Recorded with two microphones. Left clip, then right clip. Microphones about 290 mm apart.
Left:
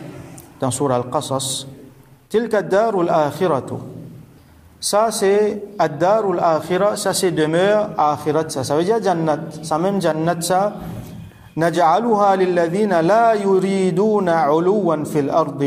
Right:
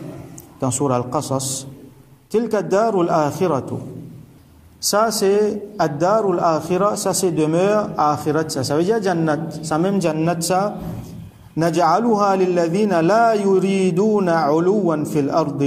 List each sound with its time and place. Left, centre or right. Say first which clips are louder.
0.6 s a man's voice: left 1 dB; centre
4.8 s a man's voice: left 1 dB; centre
6.9 s speech: left 1 dB; left
7.2 s a man's voice: left 1 dB; centre